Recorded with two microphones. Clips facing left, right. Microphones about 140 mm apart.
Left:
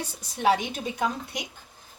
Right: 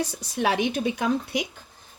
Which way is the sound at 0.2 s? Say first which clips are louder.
Left 2 dB; 85° right.